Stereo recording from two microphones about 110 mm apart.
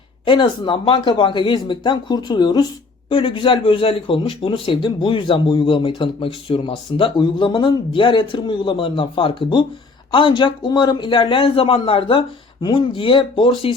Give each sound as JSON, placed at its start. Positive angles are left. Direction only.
{"t": 0.3, "sound": "a man's voice", "side_deg": 45}
{"t": 3.1, "sound": "a man's voice", "side_deg": 55}